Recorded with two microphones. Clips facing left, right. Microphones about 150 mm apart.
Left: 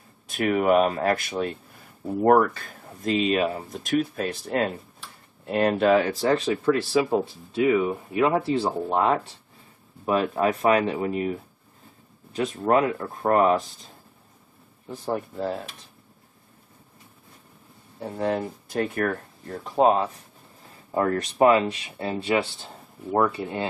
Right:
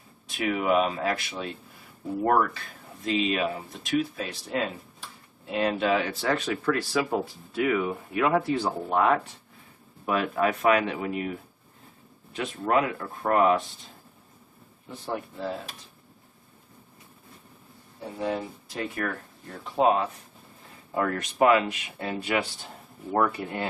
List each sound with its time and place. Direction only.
0.4 s speech: 50° left (ahead or behind)
6.2 s speech: 25° left (ahead or behind)
14.9 s speech: 45° left (ahead or behind)
18.1 s speech: 55° left (ahead or behind)
19.5 s speech: 40° left (ahead or behind); by 23.7 s 25° left (ahead or behind)